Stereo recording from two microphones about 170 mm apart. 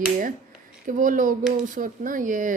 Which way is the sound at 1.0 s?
50° right (ahead or behind).